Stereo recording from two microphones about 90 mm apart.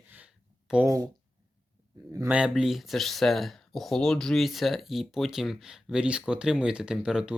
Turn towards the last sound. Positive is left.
turn(degrees=-10)  # may be behind; listen again after turning